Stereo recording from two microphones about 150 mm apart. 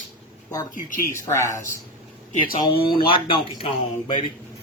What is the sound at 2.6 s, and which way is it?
Speech, 35° left (ahead or behind).